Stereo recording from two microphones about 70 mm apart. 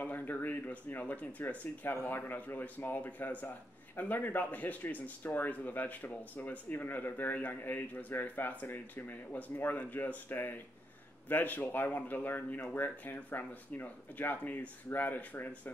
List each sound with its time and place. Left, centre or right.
0.0 s speech: left